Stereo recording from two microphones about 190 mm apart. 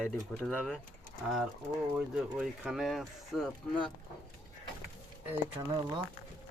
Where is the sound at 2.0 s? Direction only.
Centre (ahead or behind).